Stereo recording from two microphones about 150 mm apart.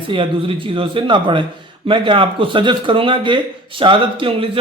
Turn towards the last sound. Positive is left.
turn(degrees=-35)  # may be behind; listen again after turning